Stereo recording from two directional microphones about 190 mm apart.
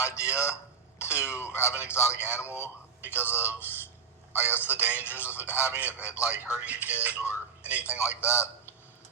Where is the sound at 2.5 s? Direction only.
15° left (ahead or behind).